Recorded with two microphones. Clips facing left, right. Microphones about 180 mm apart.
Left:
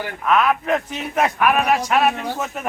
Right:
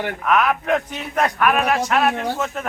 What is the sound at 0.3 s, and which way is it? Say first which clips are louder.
Speech: left 1 dB; centre (ahead or behind).